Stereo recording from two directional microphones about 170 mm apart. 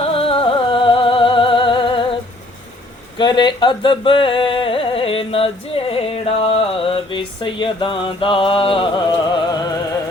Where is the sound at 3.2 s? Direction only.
25° left (ahead or behind).